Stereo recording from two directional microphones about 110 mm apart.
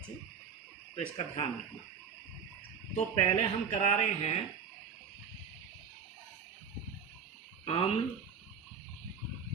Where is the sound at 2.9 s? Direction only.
90° left.